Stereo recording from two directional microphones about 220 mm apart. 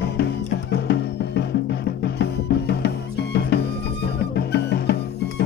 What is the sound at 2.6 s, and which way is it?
Music, 50° left (ahead or behind).